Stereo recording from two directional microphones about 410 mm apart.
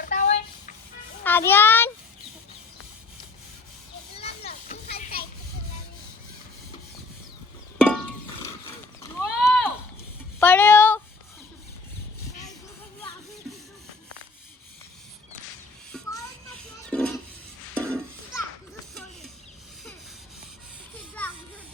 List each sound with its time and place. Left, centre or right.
0.0 s a sound: centre
1.2 s child singing: centre
4.2 s children playing: centre
7.9 s music: centre
10.4 s child singing: centre
16.9 s music: centre
21.2 s children playing: centre